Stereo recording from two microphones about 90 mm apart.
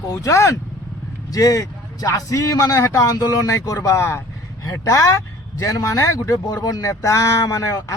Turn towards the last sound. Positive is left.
turn(degrees=35)  # may be behind; listen again after turning